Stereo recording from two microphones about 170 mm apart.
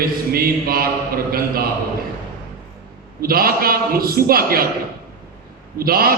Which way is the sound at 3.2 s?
60° right (ahead or behind).